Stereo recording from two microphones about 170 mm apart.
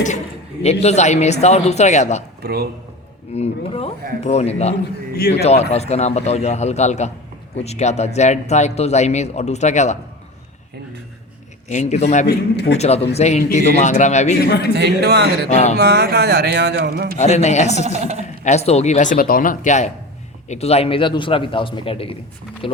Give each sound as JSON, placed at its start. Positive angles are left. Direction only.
{"t": 0.6, "sound": "speech", "side_deg": 40}
{"t": 2.4, "sound": "a man's voice", "side_deg": -70}
{"t": 3.3, "sound": "speech", "side_deg": 35}
{"t": 5.1, "sound": "a man's voice", "side_deg": 65}
{"t": 5.4, "sound": "speech", "side_deg": 40}
{"t": 11.7, "sound": "speech", "side_deg": 45}
{"t": 12.2, "sound": "a man's voice", "side_deg": 75}
{"t": 12.7, "sound": "speech", "side_deg": 40}
{"t": 14.7, "sound": "speech", "side_deg": -75}
{"t": 15.4, "sound": "speech", "side_deg": 45}
{"t": 15.7, "sound": "speech", "side_deg": -70}
{"t": 17.2, "sound": "speech", "side_deg": 40}
{"t": 17.8, "sound": "a woman's voice", "side_deg": -40}
{"t": 18.4, "sound": "speech", "side_deg": 40}